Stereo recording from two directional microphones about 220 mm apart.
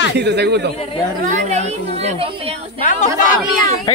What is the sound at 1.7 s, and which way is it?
A woman's voice, 25° right (ahead or behind).